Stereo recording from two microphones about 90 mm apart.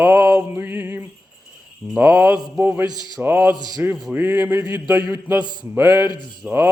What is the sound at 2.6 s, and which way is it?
Music, 20° right (ahead or behind).